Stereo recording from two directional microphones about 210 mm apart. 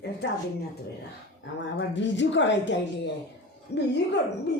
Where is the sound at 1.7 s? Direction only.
60° left (ahead or behind).